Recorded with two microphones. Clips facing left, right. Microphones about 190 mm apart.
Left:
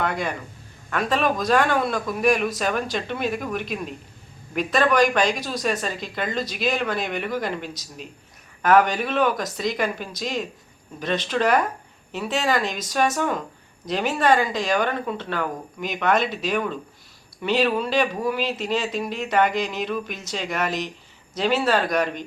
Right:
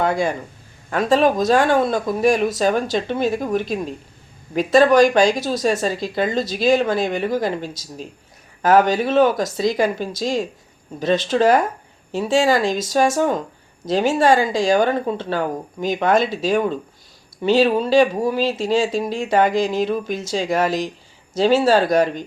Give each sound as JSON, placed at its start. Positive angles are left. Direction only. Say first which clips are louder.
{"t": 0.0, "sound": "speech", "louder": "right 6 dB", "side_deg": -30}